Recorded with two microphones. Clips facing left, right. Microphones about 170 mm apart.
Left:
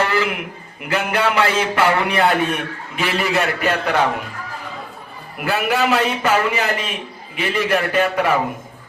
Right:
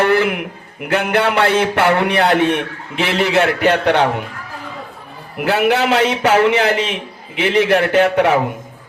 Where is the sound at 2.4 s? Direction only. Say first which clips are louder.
Right 5 dB; 80° right.